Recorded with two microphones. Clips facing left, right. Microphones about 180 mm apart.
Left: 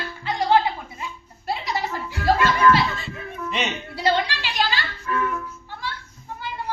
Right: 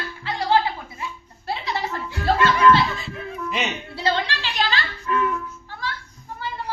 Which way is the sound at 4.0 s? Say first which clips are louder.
Left 2 dB; 10° left (ahead or behind).